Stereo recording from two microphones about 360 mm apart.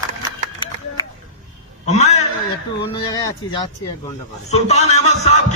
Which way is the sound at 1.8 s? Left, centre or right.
Centre.